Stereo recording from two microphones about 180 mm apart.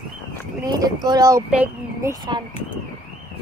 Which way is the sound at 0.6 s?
20° right (ahead or behind).